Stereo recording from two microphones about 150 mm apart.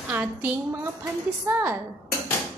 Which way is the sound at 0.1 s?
10° right (ahead or behind).